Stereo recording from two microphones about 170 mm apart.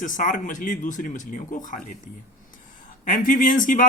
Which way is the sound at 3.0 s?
50° left (ahead or behind).